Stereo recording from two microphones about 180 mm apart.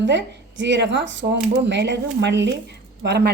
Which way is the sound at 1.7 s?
75° right (ahead or behind).